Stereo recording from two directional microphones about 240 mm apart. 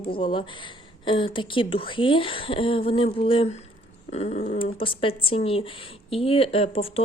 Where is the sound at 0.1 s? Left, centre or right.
Left.